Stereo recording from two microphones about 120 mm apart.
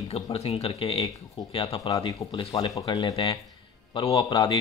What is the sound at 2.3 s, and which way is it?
Speech, 40° left (ahead or behind).